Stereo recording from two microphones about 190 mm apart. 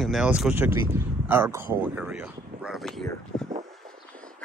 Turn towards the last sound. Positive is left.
turn(degrees=5)  # may be behind; listen again after turning